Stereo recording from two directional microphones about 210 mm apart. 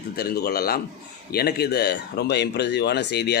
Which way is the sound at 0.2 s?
45° left (ahead or behind).